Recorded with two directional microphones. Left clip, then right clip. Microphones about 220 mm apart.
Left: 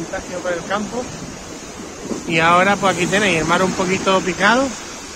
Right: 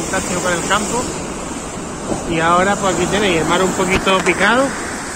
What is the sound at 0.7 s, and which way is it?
Speech, 5° left (ahead or behind).